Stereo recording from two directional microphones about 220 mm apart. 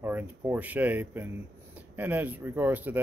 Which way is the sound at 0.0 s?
10° right (ahead or behind).